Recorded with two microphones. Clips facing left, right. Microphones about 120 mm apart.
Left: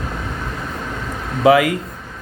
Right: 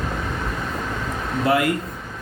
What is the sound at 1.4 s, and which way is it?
Speech, 90° left.